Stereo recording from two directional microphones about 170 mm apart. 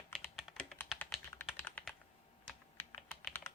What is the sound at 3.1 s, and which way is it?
Typing, 15° left (ahead or behind).